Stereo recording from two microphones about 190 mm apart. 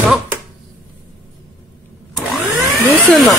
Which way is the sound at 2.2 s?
Centre (ahead or behind).